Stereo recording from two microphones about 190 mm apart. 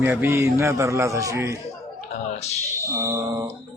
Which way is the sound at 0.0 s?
10° right (ahead or behind).